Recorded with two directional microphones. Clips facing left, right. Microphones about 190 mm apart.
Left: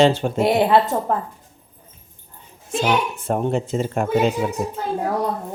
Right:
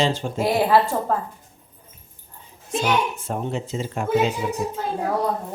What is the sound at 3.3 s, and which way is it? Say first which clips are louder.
Speech: left 6 dB; 55° left (ahead or behind).